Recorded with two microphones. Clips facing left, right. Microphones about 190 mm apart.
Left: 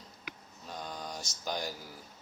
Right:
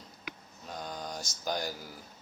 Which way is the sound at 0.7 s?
Centre (ahead or behind).